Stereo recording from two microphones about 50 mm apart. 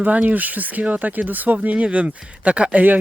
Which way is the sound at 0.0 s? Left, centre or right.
Right.